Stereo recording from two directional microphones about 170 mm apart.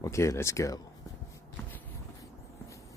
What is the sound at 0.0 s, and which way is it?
Speech, 20° left (ahead or behind).